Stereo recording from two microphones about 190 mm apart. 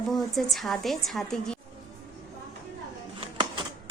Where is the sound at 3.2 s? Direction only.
25° right (ahead or behind).